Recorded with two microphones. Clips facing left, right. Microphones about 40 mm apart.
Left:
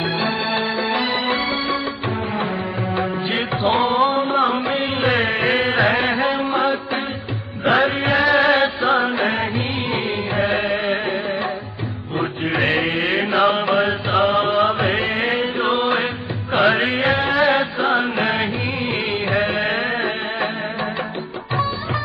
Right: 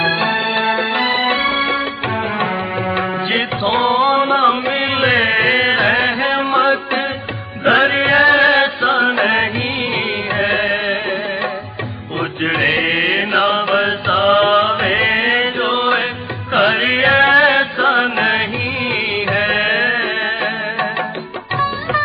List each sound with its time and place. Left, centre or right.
0.0 s music: right
2.9 s music: right
5.7 s music: right
6.3 s a sound: right
7.6 s music: right
12.1 s music: right
13.1 s mantra: right
13.6 s music: right
21.5 s music: right